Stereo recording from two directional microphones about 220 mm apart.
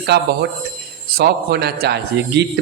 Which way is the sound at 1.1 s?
45° right (ahead or behind).